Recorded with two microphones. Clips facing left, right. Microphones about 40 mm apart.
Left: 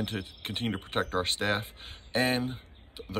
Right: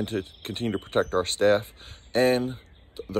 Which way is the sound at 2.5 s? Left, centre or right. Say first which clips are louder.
Right 3 dB; left.